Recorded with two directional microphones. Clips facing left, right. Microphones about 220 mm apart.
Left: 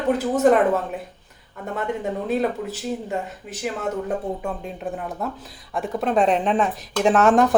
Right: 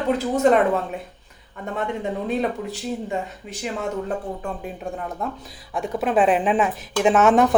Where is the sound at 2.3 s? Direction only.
5° left (ahead or behind).